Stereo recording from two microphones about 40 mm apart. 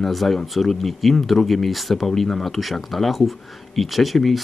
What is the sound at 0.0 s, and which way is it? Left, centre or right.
Speech, centre.